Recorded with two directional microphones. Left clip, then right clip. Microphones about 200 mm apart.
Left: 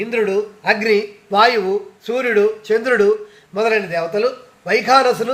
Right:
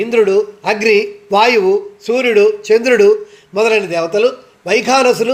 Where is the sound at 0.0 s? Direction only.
45° right (ahead or behind).